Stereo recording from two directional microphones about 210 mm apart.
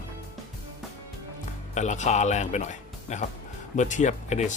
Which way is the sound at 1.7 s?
35° left (ahead or behind).